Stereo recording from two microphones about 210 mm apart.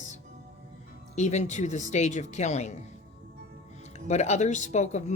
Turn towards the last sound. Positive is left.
turn(degrees=35)  # may be behind; listen again after turning